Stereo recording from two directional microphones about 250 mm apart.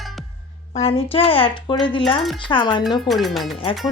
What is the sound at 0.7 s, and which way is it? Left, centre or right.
Speech, left.